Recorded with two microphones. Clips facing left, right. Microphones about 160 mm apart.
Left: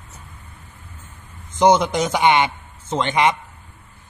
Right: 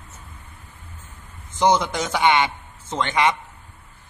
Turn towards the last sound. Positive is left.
turn(degrees=20)  # may be behind; listen again after turning